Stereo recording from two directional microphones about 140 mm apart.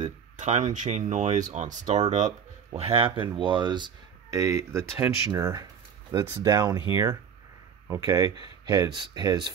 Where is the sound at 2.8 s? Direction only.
40° right (ahead or behind).